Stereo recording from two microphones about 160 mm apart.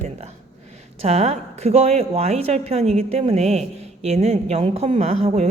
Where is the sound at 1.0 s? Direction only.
40° right (ahead or behind).